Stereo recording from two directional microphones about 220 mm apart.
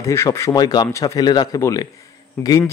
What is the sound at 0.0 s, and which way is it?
A man's voice, 10° left (ahead or behind).